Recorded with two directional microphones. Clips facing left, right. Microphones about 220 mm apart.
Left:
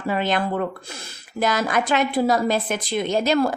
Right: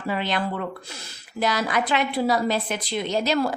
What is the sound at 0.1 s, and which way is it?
A woman's voice, 45° left (ahead or behind).